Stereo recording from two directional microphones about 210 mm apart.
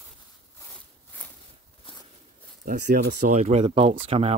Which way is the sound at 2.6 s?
40° right (ahead or behind).